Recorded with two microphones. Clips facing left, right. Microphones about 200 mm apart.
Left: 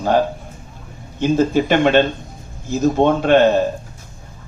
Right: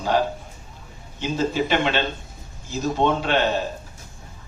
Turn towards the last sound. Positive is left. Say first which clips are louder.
# left 9 dB
turn(degrees=50)  # may be behind; listen again after turning